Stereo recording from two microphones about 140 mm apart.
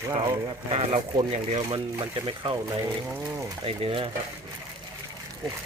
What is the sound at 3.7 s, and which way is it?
Speech, 40° right (ahead or behind).